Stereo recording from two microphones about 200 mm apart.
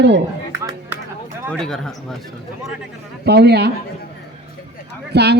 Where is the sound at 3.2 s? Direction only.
55° right (ahead or behind).